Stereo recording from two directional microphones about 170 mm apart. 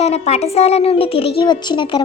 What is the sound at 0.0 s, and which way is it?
A woman's voice, 40° left (ahead or behind).